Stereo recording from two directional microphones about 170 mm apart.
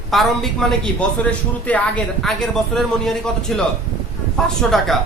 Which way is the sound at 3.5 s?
5° left (ahead or behind).